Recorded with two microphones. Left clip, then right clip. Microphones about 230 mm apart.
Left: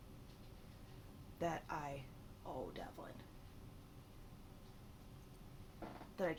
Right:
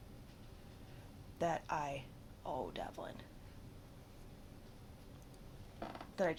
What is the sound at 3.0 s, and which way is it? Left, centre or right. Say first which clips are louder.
Speech: right 6 dB; right.